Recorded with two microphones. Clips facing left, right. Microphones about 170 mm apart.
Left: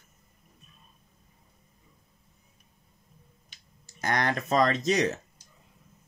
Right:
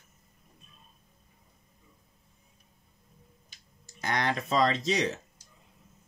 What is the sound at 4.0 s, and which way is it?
Speech, 50° left (ahead or behind).